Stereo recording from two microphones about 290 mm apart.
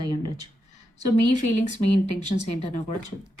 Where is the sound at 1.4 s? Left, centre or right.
Left.